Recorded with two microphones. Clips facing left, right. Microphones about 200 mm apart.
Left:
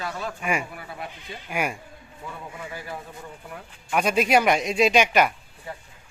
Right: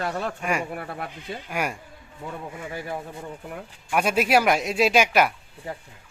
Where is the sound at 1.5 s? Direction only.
5° left (ahead or behind).